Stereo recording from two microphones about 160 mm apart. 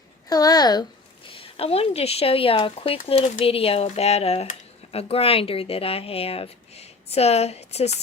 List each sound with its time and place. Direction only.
0.3 s a child's voice: 25° left (ahead or behind)
1.3 s speech: 35° left (ahead or behind)